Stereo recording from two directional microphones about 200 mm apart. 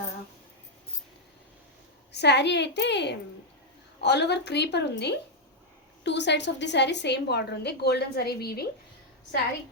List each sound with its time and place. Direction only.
2.1 s a woman's voice: 60° left (ahead or behind)